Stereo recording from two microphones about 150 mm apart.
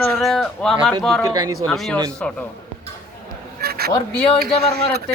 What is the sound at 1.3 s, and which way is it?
Speech, 25° right (ahead or behind).